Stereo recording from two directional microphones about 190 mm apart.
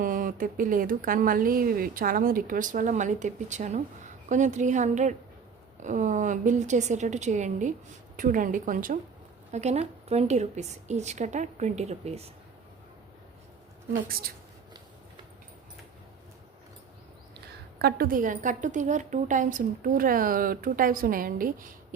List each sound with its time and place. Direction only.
0.0 s a woman's voice: 45° right (ahead or behind)
14.1 s a woman's voice: 50° right (ahead or behind)
17.7 s a woman's voice: 55° right (ahead or behind)